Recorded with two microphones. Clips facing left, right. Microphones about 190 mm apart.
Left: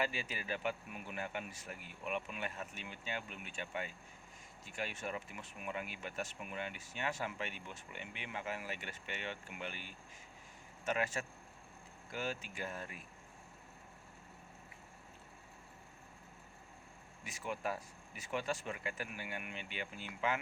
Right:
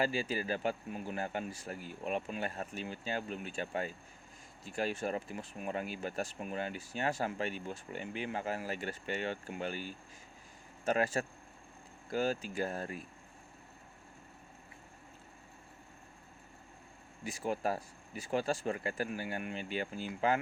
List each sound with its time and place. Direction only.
0.0 s speech: 35° right (ahead or behind)
17.2 s speech: 35° right (ahead or behind)